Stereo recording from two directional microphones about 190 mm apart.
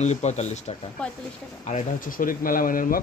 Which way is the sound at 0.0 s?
35° left (ahead or behind).